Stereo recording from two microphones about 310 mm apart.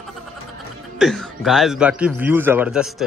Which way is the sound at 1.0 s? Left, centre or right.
Centre.